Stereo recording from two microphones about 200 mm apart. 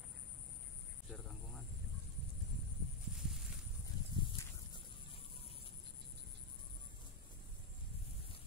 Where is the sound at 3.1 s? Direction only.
Centre (ahead or behind).